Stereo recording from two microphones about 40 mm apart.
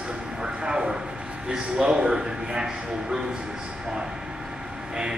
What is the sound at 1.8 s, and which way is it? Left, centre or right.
A man's voice, right.